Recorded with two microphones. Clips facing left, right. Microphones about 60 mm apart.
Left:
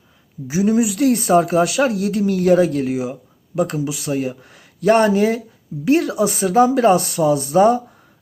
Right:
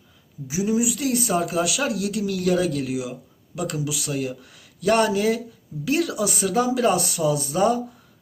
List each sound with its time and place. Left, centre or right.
0.4 s speech: left